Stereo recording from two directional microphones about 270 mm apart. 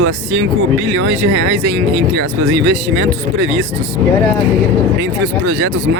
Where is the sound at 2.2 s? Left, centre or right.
Right.